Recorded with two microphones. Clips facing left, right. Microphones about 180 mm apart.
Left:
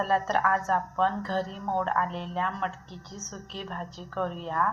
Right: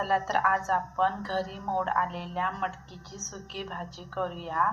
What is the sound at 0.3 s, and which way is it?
A woman's voice, 5° right (ahead or behind).